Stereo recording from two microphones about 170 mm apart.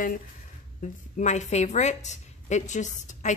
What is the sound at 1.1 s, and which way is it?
Speech, 45° left (ahead or behind).